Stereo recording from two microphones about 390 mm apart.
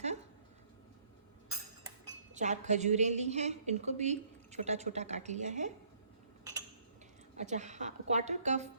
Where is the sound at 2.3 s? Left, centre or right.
Centre.